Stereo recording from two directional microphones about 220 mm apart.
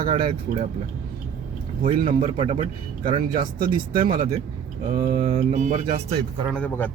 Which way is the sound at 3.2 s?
40° right (ahead or behind).